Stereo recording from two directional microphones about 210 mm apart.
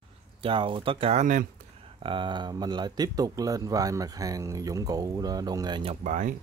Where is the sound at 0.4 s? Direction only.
25° right (ahead or behind).